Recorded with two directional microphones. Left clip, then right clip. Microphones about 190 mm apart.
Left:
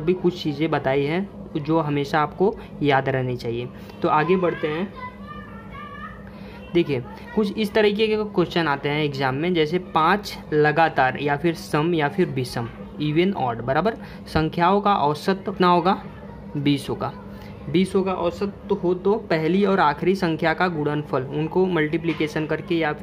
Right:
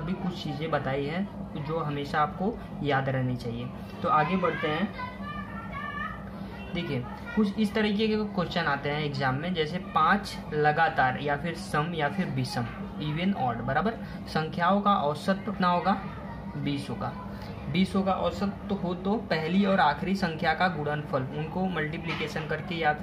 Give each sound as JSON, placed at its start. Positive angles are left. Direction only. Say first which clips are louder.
{"t": 0.0, "sound": "speech", "louder": "left 13 dB", "side_deg": 55}
{"t": 6.7, "sound": "a child's voice", "louder": "left 12 dB", "side_deg": 50}